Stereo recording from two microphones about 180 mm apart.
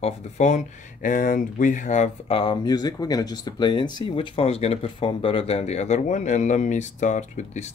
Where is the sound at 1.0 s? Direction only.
50° left (ahead or behind).